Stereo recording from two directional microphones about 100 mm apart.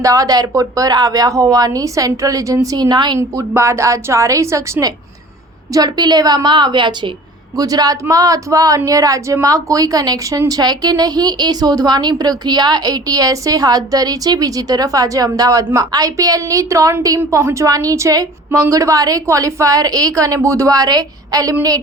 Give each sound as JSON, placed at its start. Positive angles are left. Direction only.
{"t": 0.0, "sound": "speech", "side_deg": -35}
{"t": 3.2, "sound": "a woman's voice", "side_deg": -25}
{"t": 7.5, "sound": "speech", "side_deg": -40}